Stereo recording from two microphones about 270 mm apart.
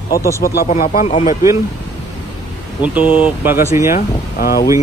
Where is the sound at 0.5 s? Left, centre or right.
Left.